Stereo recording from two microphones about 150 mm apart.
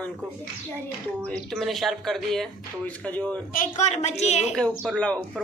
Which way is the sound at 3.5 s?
60° left (ahead or behind).